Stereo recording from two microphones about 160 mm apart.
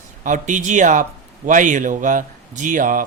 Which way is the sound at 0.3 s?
50° right (ahead or behind).